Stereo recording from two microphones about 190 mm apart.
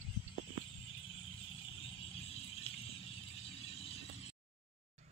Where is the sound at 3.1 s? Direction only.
30° left (ahead or behind).